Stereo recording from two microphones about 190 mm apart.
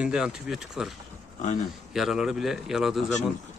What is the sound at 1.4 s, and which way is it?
Speech, 35° left (ahead or behind).